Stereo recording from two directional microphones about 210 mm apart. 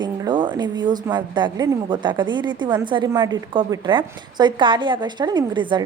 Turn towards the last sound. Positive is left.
turn(degrees=-20)  # may be behind; listen again after turning